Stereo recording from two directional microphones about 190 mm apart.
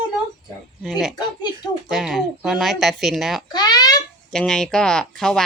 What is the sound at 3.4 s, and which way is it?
Speech, 20° left (ahead or behind).